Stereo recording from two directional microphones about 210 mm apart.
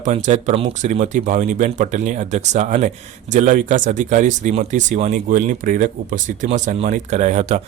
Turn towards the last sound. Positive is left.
turn(degrees=-35)  # may be behind; listen again after turning